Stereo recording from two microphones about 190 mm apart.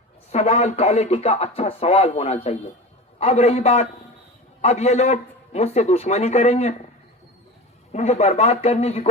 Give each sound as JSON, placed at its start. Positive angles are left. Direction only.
{"t": 0.3, "sound": "speech", "side_deg": 35}
{"t": 7.9, "sound": "speech", "side_deg": 35}